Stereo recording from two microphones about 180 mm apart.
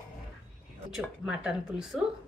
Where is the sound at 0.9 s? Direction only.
5° right (ahead or behind).